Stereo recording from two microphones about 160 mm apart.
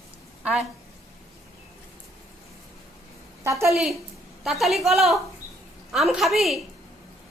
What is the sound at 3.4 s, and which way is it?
Speech, 15° right (ahead or behind).